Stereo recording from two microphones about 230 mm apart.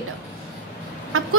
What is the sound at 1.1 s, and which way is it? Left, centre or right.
Chicken, right.